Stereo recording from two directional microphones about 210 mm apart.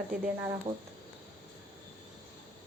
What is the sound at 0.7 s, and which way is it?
Speech, 20° right (ahead or behind).